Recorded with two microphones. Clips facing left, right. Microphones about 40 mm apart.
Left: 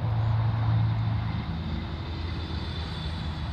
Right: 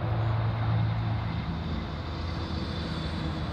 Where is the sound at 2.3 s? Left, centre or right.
Left.